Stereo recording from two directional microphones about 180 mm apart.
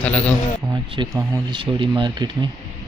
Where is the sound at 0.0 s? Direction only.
5° left (ahead or behind).